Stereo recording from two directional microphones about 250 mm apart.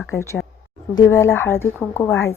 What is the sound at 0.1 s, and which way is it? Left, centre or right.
A woman's voice, centre.